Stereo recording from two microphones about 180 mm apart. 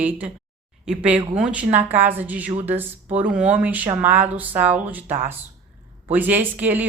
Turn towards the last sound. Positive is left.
turn(degrees=-10)  # may be behind; listen again after turning